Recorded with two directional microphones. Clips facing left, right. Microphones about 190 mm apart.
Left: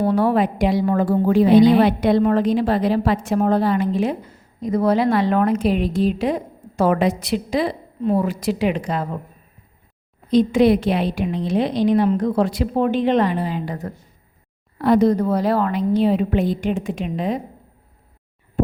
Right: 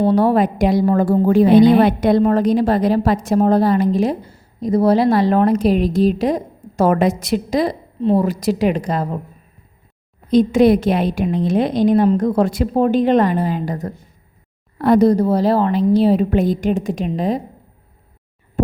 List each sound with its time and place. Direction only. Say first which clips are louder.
0.0 s a woman's voice: right 3 dB; 35° right (ahead or behind)
10.3 s a woman's voice: right 3 dB; 45° right (ahead or behind)